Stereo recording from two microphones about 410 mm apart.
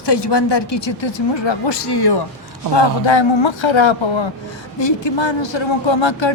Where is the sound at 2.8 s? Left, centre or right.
Left.